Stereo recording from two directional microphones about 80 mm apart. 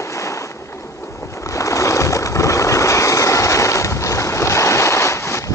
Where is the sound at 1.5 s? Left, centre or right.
Left.